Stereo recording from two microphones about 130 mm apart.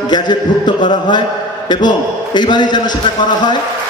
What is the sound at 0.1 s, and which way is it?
A man's voice, 35° left (ahead or behind).